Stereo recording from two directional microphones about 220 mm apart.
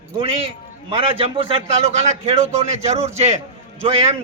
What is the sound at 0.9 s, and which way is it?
A man's voice, 25° right (ahead or behind).